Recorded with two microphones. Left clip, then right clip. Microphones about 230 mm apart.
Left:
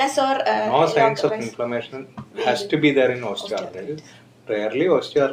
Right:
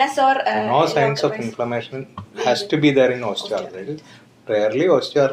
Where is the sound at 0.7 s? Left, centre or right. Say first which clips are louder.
Left 1 dB; right.